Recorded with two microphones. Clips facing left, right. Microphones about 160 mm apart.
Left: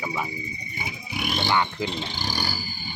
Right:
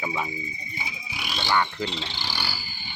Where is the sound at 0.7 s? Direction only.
55° left (ahead or behind).